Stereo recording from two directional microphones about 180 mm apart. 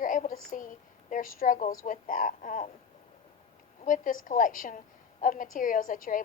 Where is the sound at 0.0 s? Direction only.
45° left (ahead or behind).